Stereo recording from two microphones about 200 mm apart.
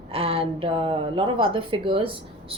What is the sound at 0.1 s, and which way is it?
A woman's voice, 30° right (ahead or behind).